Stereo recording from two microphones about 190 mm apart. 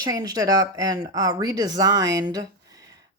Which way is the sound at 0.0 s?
20° right (ahead or behind).